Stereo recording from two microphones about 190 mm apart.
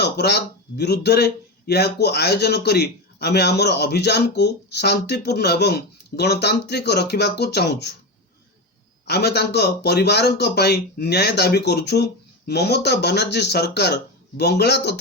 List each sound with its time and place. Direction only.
0.0 s speech: 60° left (ahead or behind)
9.0 s speech: 60° left (ahead or behind)